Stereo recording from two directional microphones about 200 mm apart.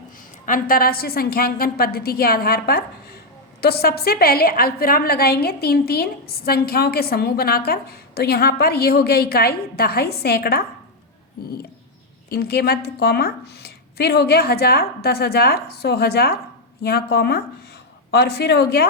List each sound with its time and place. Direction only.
0.4 s a woman's voice: 45° left (ahead or behind)
12.3 s a woman's voice: 50° left (ahead or behind)